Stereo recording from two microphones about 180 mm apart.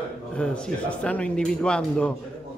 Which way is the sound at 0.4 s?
5° left (ahead or behind).